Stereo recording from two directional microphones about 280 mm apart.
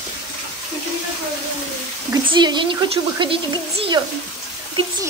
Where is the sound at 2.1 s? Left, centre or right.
Centre.